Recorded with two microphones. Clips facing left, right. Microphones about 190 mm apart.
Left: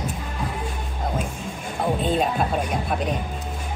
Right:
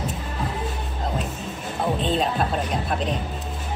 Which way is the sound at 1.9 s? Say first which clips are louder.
Left 1 dB; 5° left (ahead or behind).